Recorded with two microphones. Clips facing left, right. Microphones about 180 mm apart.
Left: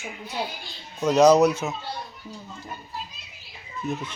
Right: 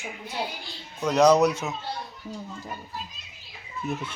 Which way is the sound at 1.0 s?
5° left (ahead or behind).